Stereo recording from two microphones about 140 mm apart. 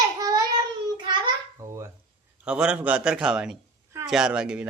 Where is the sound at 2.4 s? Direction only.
5° right (ahead or behind).